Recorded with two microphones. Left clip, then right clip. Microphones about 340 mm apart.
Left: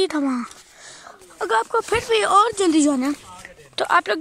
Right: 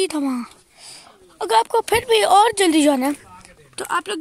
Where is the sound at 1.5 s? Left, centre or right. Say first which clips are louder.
Right 3 dB; centre.